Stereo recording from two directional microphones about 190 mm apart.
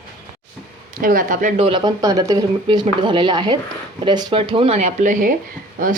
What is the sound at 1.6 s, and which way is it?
Speech, 25° right (ahead or behind).